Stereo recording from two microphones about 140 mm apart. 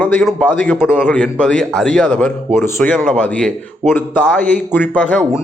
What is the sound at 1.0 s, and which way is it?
A man's voice, 10° left (ahead or behind).